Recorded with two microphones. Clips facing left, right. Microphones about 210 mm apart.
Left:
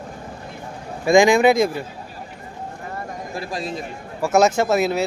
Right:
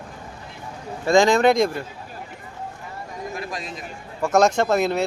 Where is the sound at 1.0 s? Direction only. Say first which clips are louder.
Left 2 dB; 10° left (ahead or behind).